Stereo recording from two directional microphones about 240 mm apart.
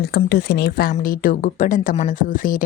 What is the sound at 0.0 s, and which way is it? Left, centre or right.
Speech, left.